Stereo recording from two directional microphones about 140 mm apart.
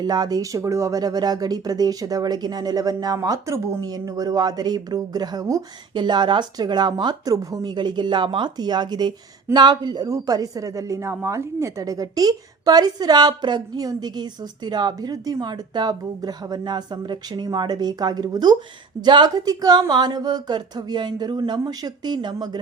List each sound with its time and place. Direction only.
0.0 s a woman's voice: 30° right (ahead or behind)